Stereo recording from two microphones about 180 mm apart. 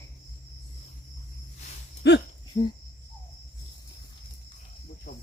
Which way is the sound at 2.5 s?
35° left (ahead or behind).